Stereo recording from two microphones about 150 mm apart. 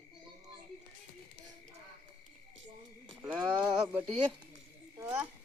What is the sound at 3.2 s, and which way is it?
Speech, 10° right (ahead or behind).